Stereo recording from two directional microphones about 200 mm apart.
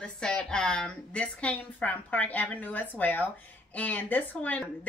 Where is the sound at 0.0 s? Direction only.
5° left (ahead or behind).